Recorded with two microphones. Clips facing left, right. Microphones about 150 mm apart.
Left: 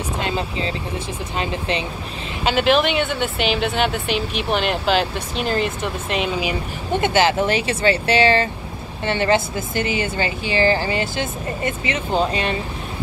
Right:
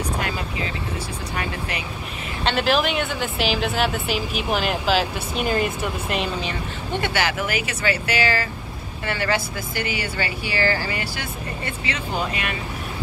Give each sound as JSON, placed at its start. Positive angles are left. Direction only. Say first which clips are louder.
{"t": 0.2, "sound": "speech", "louder": "left 4 dB", "side_deg": 25}
{"t": 2.4, "sound": "a woman's voice", "louder": "left 4 dB", "side_deg": 0}
{"t": 7.0, "sound": "speech", "louder": "left 7 dB", "side_deg": 25}